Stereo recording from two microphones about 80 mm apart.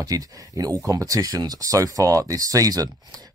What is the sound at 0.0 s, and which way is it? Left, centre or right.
Speech, right.